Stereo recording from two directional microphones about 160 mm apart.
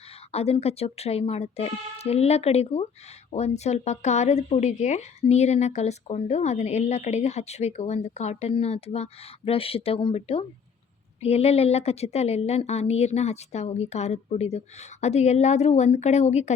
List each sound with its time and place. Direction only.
0.3 s speech: 40° left (ahead or behind)